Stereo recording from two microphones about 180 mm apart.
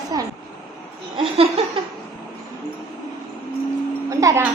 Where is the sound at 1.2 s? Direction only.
30° right (ahead or behind).